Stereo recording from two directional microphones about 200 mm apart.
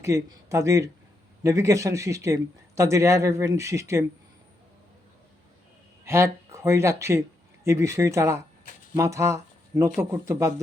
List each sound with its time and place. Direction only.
0.0 s a man's voice: 15° right (ahead or behind)
6.1 s a man's voice: 15° right (ahead or behind)